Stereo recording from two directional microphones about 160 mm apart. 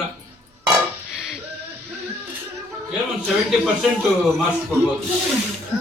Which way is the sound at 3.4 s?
5° right (ahead or behind).